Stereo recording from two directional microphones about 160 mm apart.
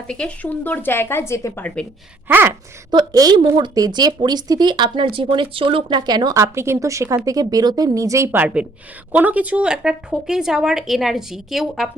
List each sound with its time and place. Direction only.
0.1 s speech: 5° left (ahead or behind)
2.2 s gasp: 15° right (ahead or behind)
2.9 s speech: 25° right (ahead or behind); by 11.9 s centre (ahead or behind)